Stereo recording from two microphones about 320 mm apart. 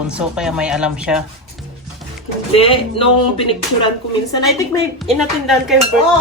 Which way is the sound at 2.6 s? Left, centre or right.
Centre.